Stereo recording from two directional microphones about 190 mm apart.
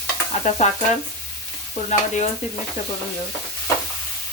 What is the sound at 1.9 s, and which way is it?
Stir, 40° left (ahead or behind).